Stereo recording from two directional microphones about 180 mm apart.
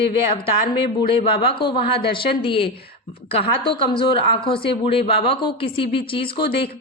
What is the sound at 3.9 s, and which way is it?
Speech, 30° left (ahead or behind).